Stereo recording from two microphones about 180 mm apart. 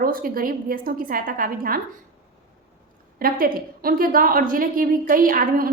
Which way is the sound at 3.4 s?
55° right (ahead or behind).